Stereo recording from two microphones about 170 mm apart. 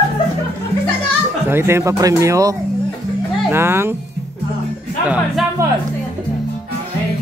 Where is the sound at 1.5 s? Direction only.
15° right (ahead or behind).